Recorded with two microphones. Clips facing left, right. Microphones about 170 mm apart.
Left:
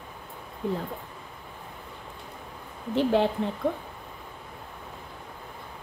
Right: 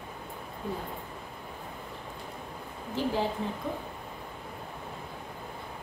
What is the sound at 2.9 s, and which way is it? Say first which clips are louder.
Speech: left 7 dB; 65° left (ahead or behind).